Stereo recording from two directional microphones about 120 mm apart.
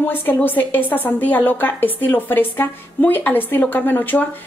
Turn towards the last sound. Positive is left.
turn(degrees=15)  # may be behind; listen again after turning